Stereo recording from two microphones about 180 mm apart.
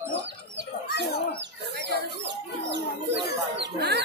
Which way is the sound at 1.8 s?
75° right (ahead or behind).